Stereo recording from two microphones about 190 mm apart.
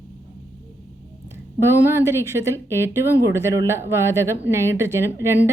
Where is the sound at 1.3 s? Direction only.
15° right (ahead or behind).